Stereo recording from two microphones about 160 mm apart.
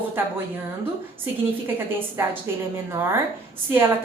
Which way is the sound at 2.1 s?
15° right (ahead or behind).